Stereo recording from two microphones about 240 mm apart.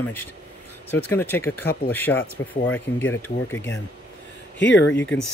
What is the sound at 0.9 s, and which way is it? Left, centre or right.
Speech, centre.